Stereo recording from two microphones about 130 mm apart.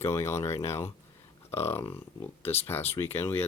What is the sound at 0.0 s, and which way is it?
Speech, 20° left (ahead or behind).